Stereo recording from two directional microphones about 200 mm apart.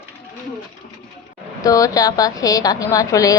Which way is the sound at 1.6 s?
15° left (ahead or behind).